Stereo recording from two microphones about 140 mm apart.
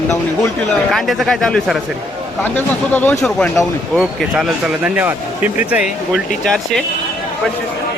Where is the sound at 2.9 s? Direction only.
15° left (ahead or behind); by 5.9 s 10° right (ahead or behind).